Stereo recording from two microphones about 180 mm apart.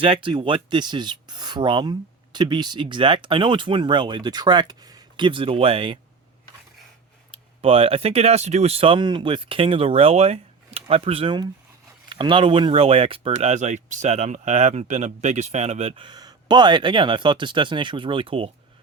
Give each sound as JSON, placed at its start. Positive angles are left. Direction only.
{"t": 0.0, "sound": "speech", "side_deg": -30}
{"t": 7.3, "sound": "speech", "side_deg": -30}